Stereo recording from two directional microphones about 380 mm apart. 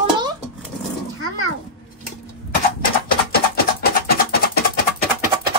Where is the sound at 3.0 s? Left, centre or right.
Left.